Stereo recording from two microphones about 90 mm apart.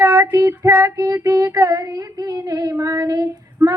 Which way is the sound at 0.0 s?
35° right (ahead or behind).